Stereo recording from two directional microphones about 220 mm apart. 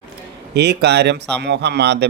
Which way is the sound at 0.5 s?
50° right (ahead or behind).